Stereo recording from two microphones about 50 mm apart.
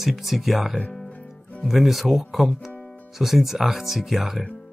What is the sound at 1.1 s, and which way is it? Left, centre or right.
Music, left.